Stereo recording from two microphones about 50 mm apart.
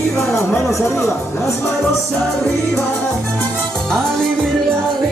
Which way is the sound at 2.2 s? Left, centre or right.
Centre.